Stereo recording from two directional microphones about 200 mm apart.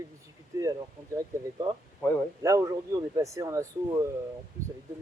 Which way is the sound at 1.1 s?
20° right (ahead or behind).